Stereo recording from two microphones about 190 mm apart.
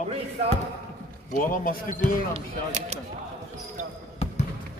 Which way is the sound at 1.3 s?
45° left (ahead or behind).